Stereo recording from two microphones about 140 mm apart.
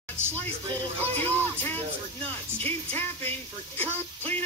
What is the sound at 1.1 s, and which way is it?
Speech, 15° left (ahead or behind).